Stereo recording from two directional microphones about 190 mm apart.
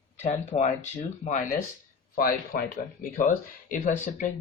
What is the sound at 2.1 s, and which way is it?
Speech, 50° left (ahead or behind).